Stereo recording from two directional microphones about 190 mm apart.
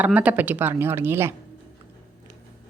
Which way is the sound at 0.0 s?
5° right (ahead or behind).